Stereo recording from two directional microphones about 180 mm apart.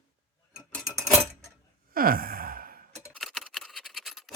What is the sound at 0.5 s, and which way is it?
Clock, 10° left (ahead or behind).